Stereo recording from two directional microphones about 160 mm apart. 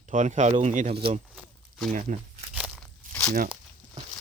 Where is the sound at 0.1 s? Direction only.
50° right (ahead or behind).